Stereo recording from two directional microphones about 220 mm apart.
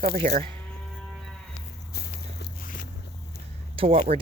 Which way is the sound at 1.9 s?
50° left (ahead or behind).